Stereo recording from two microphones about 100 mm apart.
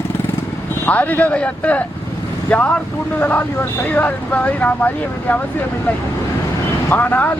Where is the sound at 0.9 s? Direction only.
15° left (ahead or behind).